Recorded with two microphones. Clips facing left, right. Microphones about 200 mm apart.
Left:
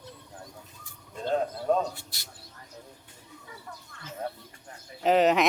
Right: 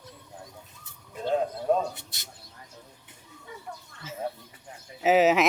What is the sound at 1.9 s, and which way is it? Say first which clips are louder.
Speech: even; 20° right (ahead or behind).